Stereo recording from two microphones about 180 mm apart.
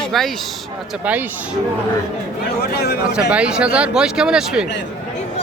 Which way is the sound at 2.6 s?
65° left (ahead or behind).